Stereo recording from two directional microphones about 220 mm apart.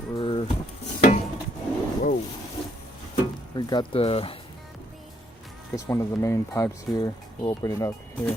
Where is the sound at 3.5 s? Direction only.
20° left (ahead or behind).